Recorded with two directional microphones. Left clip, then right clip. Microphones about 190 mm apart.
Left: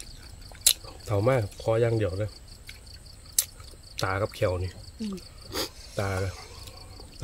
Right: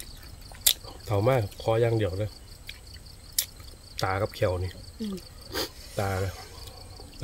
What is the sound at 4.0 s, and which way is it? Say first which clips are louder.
Speech: even; 10° left (ahead or behind).